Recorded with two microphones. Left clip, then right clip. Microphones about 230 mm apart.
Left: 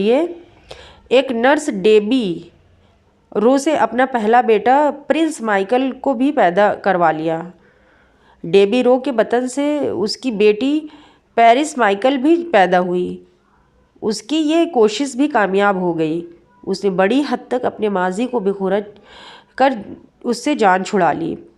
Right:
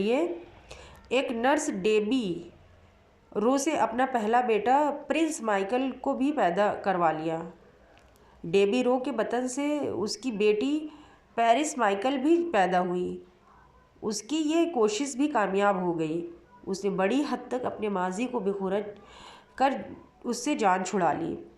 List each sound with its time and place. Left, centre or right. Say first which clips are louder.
0.0 s speech: left 11 dB; left
8.4 s speech: left 12 dB; left